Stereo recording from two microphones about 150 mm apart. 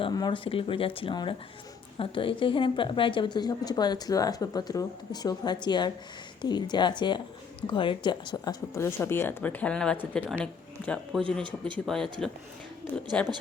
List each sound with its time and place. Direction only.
0.0 s a woman's voice: 30° left (ahead or behind)
8.7 s speech: 15° left (ahead or behind)
13.1 s speech: 10° left (ahead or behind)